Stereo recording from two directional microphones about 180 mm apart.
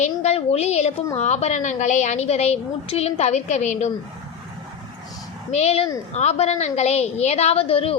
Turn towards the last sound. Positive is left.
turn(degrees=30)  # may be behind; listen again after turning